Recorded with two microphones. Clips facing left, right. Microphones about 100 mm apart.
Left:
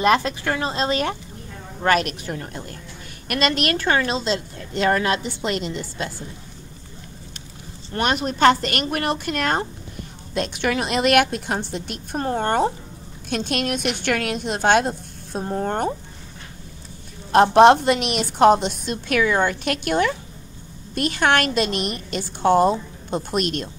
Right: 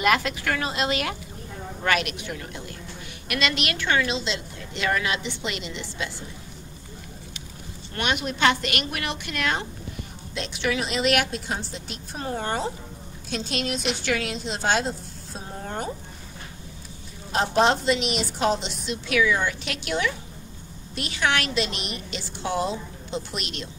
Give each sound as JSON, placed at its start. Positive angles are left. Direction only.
{"t": 0.0, "sound": "a woman's voice", "side_deg": 30}
{"t": 7.9, "sound": "a woman's voice", "side_deg": 40}
{"t": 17.3, "sound": "a woman's voice", "side_deg": 55}